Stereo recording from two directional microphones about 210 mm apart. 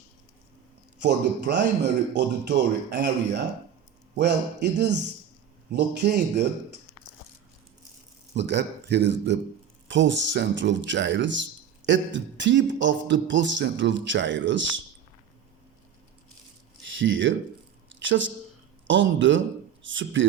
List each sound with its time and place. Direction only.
1.0 s a man's voice: 55° right (ahead or behind)
5.7 s a man's voice: 50° right (ahead or behind)
8.4 s speech: 55° right (ahead or behind)
16.8 s speech: 60° right (ahead or behind)
17.8 s a sound: 60° right (ahead or behind)
18.9 s speech: 60° right (ahead or behind)